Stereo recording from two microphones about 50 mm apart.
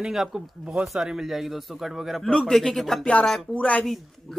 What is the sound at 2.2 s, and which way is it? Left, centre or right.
Speech, centre.